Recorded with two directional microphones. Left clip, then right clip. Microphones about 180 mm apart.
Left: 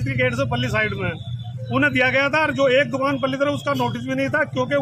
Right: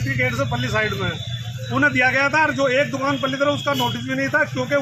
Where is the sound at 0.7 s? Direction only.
20° left (ahead or behind).